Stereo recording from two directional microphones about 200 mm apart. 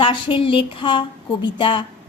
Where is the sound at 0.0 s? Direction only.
25° left (ahead or behind).